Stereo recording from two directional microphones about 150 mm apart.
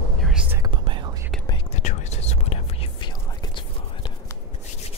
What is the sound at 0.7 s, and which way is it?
Whispering, 35° right (ahead or behind).